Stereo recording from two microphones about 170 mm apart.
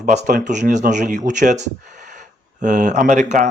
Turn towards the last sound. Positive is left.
turn(degrees=-45)  # may be behind; listen again after turning